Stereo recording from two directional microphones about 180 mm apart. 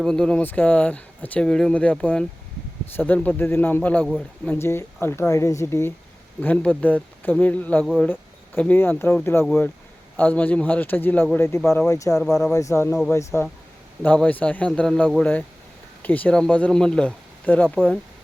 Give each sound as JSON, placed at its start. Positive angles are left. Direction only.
{"t": 0.0, "sound": "speech", "side_deg": 5}